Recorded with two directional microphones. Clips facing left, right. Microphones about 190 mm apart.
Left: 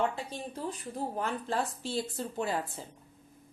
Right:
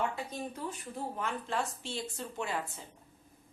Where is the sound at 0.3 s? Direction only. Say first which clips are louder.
Left 1 dB; 35° left (ahead or behind).